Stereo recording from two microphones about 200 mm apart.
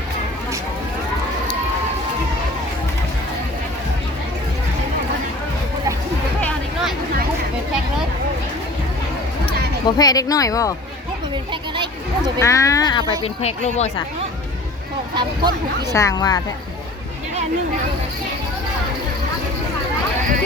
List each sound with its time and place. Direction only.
10.0 s speech: 20° left (ahead or behind)
12.4 s speech: 15° left (ahead or behind)
13.2 s speech: 35° left (ahead or behind)
15.1 s speech: 20° right (ahead or behind)
15.9 s speech: 15° left (ahead or behind)